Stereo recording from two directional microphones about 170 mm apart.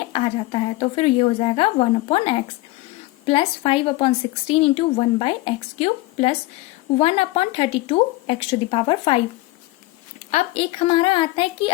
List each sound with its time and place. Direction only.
0.1 s a woman's voice: 35° left (ahead or behind)
10.3 s a woman's voice: 35° left (ahead or behind)